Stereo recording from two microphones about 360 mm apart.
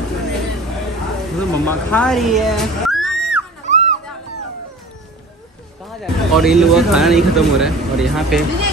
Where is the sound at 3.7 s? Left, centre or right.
Centre.